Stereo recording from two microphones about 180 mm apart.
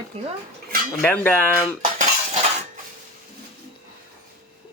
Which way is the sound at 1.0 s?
10° left (ahead or behind).